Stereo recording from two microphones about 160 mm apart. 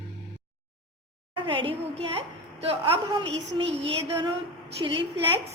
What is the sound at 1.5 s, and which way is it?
A woman's voice, 35° right (ahead or behind).